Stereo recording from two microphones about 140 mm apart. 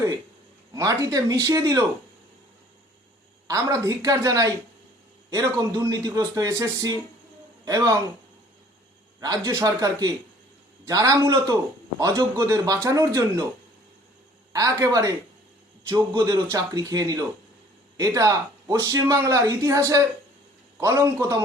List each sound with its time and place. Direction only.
0.7 s speech: 25° right (ahead or behind)
3.4 s speech: 25° right (ahead or behind)
9.2 s speech: 25° right (ahead or behind)
14.5 s speech: 25° right (ahead or behind)